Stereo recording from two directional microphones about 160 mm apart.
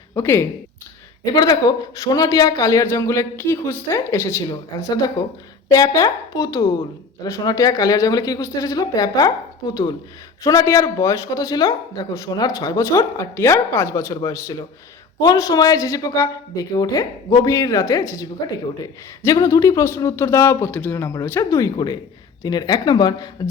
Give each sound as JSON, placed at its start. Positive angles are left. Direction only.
{"t": 0.1, "sound": "speech", "side_deg": 15}